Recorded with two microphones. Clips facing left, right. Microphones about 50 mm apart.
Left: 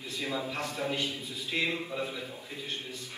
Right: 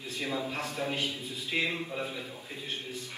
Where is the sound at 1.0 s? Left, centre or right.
Right.